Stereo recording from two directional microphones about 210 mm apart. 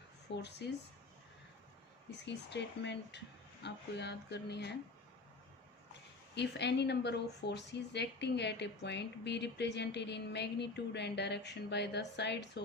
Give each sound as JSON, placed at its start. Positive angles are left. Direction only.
{"t": 0.3, "sound": "speech", "side_deg": 55}
{"t": 2.0, "sound": "speech", "side_deg": 55}
{"t": 6.3, "sound": "speech", "side_deg": 55}